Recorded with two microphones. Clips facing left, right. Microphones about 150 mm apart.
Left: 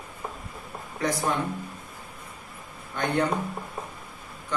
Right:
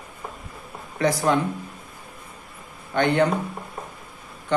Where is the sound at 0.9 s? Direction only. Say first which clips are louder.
Right 6 dB; 90° right.